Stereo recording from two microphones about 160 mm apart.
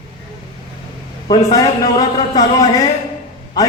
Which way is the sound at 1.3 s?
25° left (ahead or behind).